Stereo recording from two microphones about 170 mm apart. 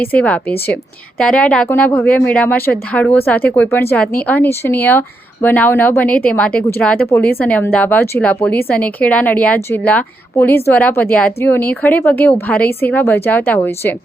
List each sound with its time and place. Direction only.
0.0 s speech: 10° left (ahead or behind)